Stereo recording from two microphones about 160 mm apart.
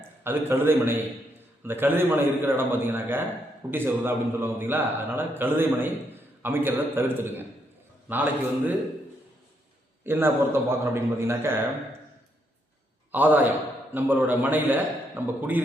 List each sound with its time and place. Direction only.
0.3 s a man's voice: 15° right (ahead or behind)
10.1 s a man's voice: 15° right (ahead or behind)
13.1 s a man's voice: 10° right (ahead or behind)